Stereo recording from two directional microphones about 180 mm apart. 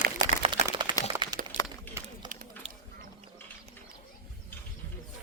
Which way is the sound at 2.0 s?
15° right (ahead or behind).